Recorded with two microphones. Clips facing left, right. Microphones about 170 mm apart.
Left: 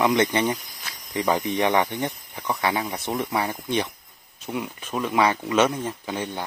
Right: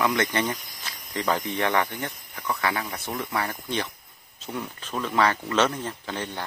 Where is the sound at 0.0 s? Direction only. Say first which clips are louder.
Left 4 dB; 20° left (ahead or behind).